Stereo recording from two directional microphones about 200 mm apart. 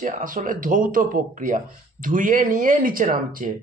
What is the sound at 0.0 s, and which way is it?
Speech, 40° right (ahead or behind).